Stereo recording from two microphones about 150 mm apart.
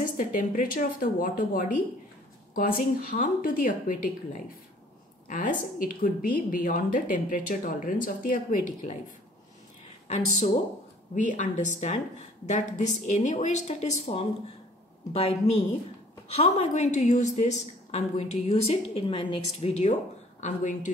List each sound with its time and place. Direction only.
0.0 s a woman's voice: 60° left (ahead or behind)
10.0 s a woman's voice: 50° left (ahead or behind)